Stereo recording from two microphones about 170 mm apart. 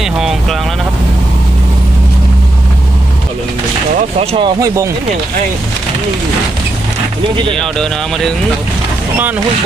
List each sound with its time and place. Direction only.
0.0 s boat: centre (ahead or behind)
4.2 s speech: 30° right (ahead or behind)
7.5 s speech: 5° left (ahead or behind)